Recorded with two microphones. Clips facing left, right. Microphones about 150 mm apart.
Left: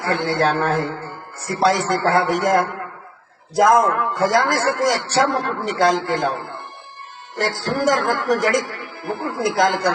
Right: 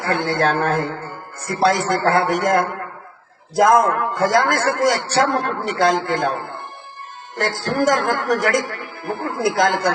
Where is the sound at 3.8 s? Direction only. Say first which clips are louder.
Even; 50° right (ahead or behind).